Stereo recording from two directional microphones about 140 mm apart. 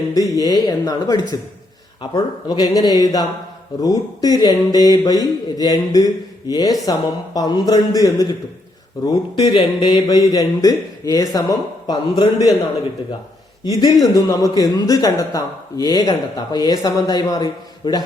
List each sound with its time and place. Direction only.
0.1 s speech: 25° left (ahead or behind)
13.7 s a man's voice: 35° left (ahead or behind)